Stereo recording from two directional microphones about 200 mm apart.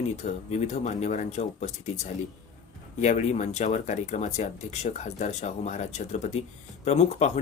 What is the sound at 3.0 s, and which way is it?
Speech, 35° left (ahead or behind).